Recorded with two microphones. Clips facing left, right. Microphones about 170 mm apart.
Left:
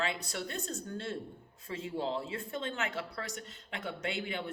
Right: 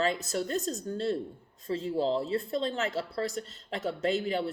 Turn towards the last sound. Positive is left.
turn(degrees=-35)  # may be behind; listen again after turning